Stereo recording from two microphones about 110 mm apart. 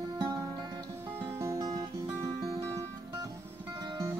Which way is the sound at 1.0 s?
20° right (ahead or behind).